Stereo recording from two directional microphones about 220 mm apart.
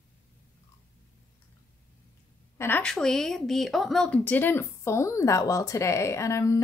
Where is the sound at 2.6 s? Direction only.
5° left (ahead or behind).